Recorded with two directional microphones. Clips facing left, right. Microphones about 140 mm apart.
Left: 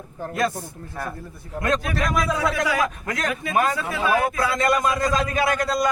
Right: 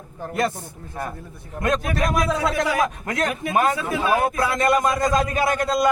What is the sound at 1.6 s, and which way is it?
Speech, 20° right (ahead or behind).